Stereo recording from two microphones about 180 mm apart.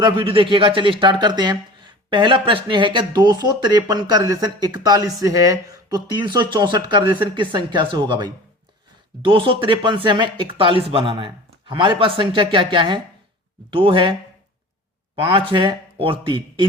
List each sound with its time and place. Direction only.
0.0 s speech: 30° right (ahead or behind)